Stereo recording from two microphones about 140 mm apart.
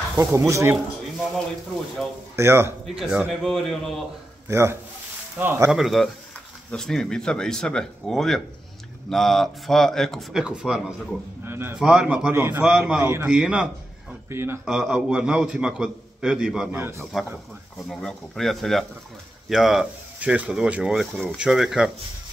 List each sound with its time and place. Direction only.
0.2 s speech: 20° right (ahead or behind)
2.3 s a man's voice: 15° right (ahead or behind)
3.0 s a man's voice: 5° right (ahead or behind)
4.5 s a man's voice: 20° right (ahead or behind)
5.7 s a man's voice: centre (ahead or behind)
11.4 s a sound: 15° right (ahead or behind)
11.8 s a man's voice: 5° right (ahead or behind)
13.4 s a man's voice: 5° right (ahead or behind)
14.3 s a man's voice: 20° right (ahead or behind)
14.6 s a man's voice: 5° right (ahead or behind)
17.0 s a man's voice: centre (ahead or behind)